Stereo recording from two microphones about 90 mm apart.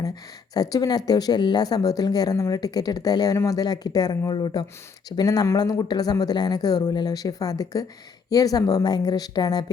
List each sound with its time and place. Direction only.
0.5 s speech: 45° left (ahead or behind)